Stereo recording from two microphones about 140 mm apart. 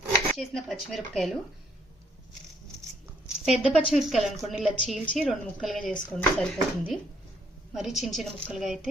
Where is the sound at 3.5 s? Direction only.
Centre (ahead or behind).